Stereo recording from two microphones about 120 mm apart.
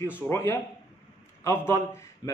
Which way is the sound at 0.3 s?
20° left (ahead or behind).